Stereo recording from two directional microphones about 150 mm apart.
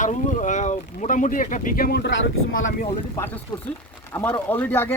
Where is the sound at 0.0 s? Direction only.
55° left (ahead or behind); by 2.0 s 80° left.